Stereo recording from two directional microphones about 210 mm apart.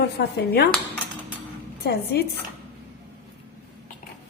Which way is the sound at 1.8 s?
50° left (ahead or behind).